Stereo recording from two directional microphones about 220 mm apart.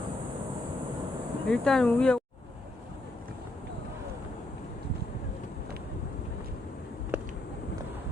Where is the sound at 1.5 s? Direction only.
5° left (ahead or behind).